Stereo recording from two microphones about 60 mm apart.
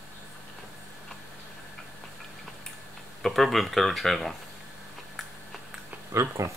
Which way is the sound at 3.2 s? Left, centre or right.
Centre.